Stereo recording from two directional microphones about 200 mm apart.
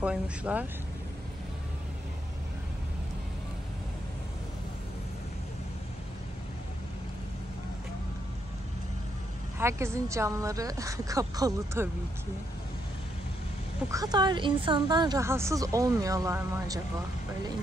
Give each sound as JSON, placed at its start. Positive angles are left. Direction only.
{"t": 0.0, "sound": "a woman's voice", "side_deg": -5}
{"t": 9.6, "sound": "a woman's voice", "side_deg": -15}
{"t": 13.8, "sound": "a woman's voice", "side_deg": -20}